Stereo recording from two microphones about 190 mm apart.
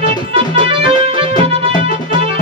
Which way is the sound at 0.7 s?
30° right (ahead or behind).